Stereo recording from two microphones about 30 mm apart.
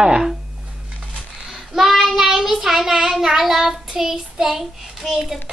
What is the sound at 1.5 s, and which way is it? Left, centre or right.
Child singing, centre.